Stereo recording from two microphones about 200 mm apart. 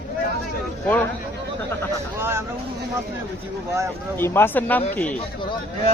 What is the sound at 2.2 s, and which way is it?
Speech, 15° right (ahead or behind).